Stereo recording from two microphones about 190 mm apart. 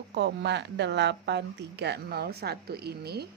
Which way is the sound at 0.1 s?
65° right (ahead or behind).